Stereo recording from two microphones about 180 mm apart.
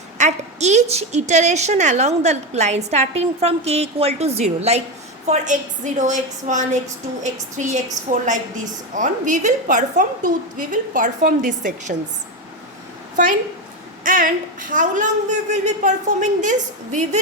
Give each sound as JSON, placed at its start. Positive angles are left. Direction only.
{"t": 0.2, "sound": "a woman's voice", "side_deg": -40}
{"t": 14.0, "sound": "a woman's voice", "side_deg": -50}